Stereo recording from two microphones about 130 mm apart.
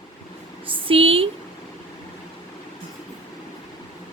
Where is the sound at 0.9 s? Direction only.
45° right (ahead or behind).